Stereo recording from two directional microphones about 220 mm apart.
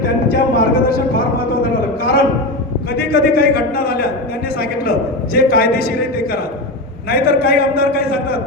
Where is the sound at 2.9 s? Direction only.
45° left (ahead or behind).